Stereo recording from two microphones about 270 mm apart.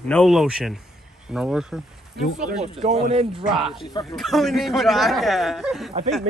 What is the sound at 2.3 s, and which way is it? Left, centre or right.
Speech, right.